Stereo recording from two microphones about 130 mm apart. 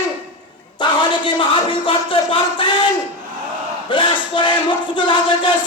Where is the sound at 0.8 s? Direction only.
35° left (ahead or behind).